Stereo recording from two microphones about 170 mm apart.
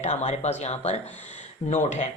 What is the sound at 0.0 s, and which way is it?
Speech, 40° left (ahead or behind).